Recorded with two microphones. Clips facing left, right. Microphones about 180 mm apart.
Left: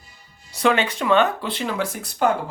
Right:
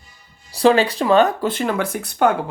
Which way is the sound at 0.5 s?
35° right (ahead or behind).